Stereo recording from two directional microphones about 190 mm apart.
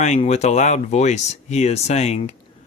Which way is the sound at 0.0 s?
35° left (ahead or behind).